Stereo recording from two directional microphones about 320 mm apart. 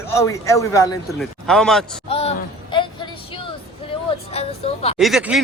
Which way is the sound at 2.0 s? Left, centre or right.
Centre.